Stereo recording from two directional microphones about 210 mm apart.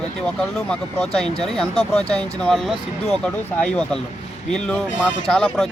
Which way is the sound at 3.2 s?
5° left (ahead or behind).